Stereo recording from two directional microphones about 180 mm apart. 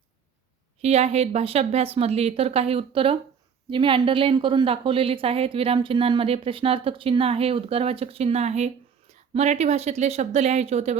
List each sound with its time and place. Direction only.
0.8 s a woman's voice: 35° right (ahead or behind)